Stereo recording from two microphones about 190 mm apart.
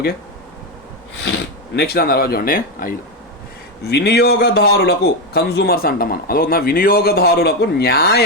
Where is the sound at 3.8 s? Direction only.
60° left (ahead or behind).